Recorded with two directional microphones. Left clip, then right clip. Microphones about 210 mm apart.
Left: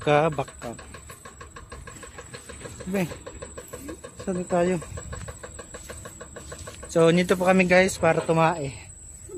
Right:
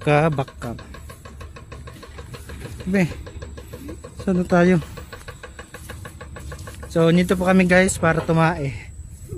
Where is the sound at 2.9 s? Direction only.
35° right (ahead or behind).